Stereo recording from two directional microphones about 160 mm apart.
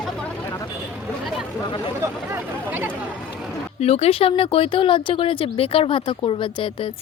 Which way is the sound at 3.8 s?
40° left (ahead or behind).